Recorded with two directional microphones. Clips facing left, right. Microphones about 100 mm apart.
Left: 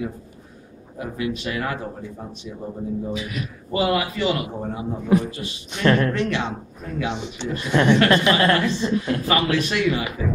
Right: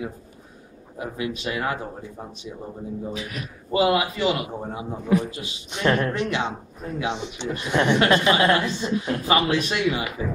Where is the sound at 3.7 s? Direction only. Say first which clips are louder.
Right 1 dB; 20° right (ahead or behind).